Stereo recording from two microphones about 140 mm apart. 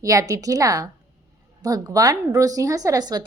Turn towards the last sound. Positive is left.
turn(degrees=-30)  # may be behind; listen again after turning